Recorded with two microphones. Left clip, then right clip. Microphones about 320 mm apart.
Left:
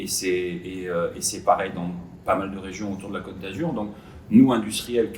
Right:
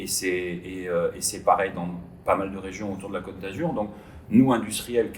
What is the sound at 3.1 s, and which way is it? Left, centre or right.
Speech, centre.